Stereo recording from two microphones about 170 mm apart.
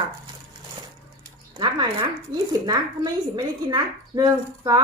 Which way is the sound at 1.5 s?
25° right (ahead or behind).